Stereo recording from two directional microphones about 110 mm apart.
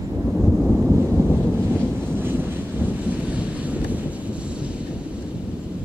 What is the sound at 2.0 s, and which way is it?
Wind noise, 20° right (ahead or behind).